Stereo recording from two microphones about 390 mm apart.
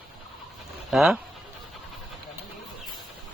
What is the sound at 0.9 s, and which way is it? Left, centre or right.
Speech, centre.